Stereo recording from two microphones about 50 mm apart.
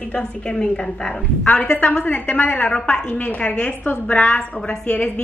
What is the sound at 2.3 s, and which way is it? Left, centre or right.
Speech, left.